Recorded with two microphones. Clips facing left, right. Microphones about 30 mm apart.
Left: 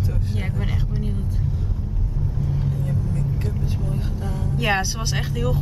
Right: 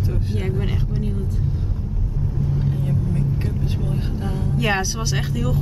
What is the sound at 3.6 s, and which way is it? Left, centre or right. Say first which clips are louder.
Vehicle: right 2 dB; right.